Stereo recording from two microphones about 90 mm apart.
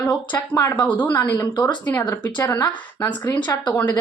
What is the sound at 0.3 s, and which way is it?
Speech, 40° left (ahead or behind).